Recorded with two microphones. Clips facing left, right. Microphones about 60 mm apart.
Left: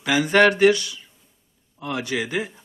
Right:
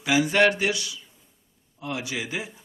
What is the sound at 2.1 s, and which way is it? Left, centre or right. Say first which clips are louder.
Speech: left 6 dB; left.